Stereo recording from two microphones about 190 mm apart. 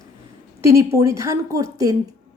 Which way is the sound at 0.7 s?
15° right (ahead or behind).